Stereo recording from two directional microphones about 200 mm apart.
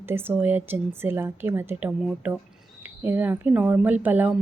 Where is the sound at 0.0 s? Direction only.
10° right (ahead or behind).